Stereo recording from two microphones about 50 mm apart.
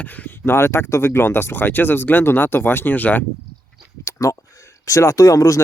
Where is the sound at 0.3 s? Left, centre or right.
Left.